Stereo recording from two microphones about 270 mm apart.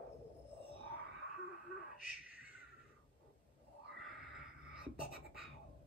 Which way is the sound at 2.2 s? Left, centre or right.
Centre.